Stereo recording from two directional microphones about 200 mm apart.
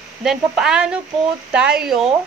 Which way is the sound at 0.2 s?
Centre (ahead or behind).